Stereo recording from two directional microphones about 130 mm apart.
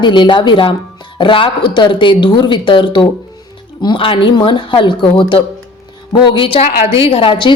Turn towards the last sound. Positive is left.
turn(degrees=40)  # may be behind; listen again after turning